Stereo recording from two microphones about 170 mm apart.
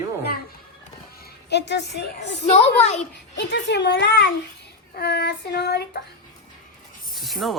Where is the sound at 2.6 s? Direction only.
40° left (ahead or behind).